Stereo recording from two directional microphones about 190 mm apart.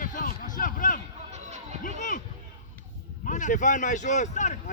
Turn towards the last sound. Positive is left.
turn(degrees=40)  # may be behind; listen again after turning